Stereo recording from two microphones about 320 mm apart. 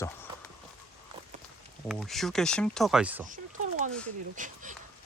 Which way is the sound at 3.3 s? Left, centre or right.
Right.